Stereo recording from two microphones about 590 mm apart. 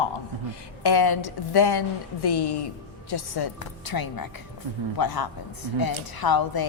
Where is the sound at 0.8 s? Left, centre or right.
Left.